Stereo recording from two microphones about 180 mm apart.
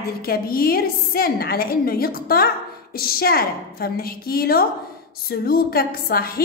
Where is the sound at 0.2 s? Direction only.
55° left (ahead or behind).